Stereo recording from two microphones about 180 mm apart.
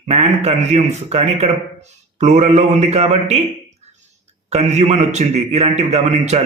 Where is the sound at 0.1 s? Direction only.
35° right (ahead or behind).